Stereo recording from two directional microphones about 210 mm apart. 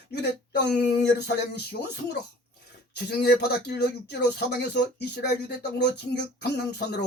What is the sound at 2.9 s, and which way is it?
Speech, 50° left (ahead or behind).